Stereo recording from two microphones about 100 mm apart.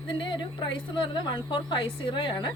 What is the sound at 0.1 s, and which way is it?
Speech, 55° left (ahead or behind).